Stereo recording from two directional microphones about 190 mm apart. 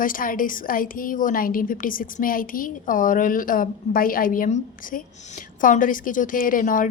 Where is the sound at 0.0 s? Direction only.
45° left (ahead or behind).